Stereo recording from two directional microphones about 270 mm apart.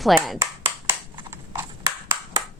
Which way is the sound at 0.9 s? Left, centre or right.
Centre.